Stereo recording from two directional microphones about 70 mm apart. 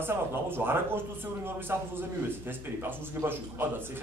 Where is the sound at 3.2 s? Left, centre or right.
Right.